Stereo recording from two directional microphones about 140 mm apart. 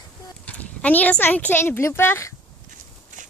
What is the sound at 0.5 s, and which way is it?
Speech, 10° left (ahead or behind).